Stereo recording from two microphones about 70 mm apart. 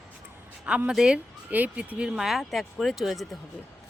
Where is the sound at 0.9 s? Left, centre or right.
Centre.